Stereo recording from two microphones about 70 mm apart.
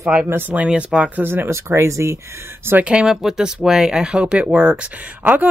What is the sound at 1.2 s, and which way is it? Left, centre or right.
Speech, right.